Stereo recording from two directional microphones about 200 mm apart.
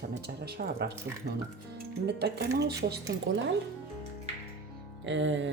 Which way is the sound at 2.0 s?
55° right (ahead or behind).